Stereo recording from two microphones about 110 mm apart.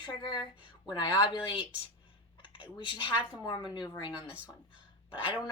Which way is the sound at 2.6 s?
50° left (ahead or behind).